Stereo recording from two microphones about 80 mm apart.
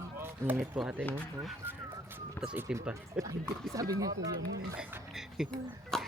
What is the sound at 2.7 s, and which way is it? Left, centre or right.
Speech, centre.